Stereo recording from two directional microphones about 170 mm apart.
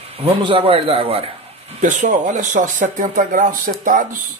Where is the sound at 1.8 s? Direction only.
45° right (ahead or behind).